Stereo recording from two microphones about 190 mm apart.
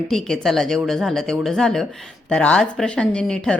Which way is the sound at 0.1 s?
Centre (ahead or behind).